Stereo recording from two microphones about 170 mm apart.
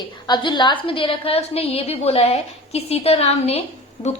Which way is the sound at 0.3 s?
25° left (ahead or behind).